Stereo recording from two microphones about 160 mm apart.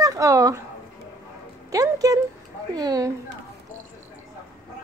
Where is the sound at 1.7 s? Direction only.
20° right (ahead or behind).